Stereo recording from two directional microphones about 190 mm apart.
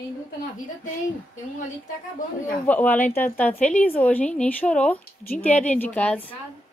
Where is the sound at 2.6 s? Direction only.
10° left (ahead or behind).